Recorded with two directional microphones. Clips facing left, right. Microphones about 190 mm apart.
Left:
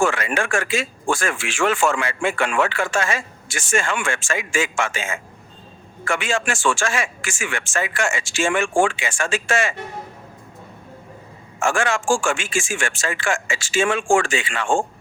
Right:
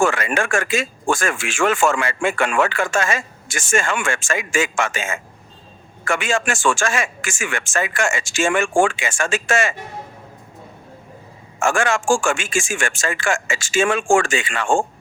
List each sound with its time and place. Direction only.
0.0 s a man's voice: 45° right (ahead or behind)
11.6 s a man's voice: 45° right (ahead or behind)